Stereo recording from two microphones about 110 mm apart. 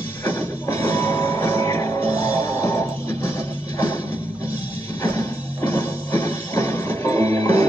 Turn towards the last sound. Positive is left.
turn(degrees=30)  # may be behind; listen again after turning